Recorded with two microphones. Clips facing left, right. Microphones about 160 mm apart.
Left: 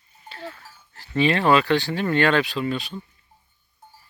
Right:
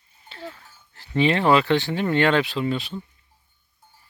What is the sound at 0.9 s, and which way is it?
Speech, 20° right (ahead or behind).